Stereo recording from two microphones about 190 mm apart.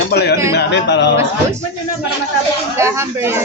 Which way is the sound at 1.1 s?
15° right (ahead or behind).